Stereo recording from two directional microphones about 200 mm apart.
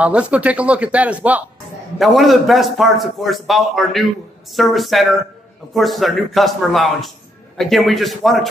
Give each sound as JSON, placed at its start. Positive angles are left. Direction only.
{"t": 0.0, "sound": "a man's voice", "side_deg": -5}